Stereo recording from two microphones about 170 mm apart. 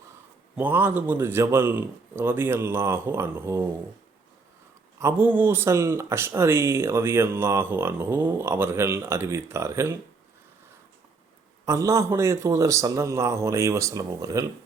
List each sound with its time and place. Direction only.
0.5 s speech: 10° right (ahead or behind)
4.9 s speech: 15° right (ahead or behind)
11.6 s speech: 20° right (ahead or behind)